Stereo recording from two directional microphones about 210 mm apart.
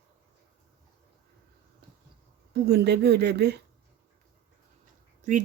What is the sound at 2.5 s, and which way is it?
Speech, 50° right (ahead or behind).